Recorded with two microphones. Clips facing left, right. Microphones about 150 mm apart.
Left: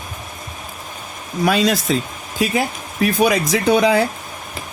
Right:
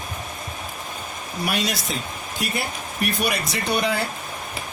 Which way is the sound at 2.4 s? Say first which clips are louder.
Left 9 dB; 90° left.